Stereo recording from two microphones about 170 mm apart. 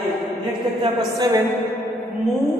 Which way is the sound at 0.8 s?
25° right (ahead or behind).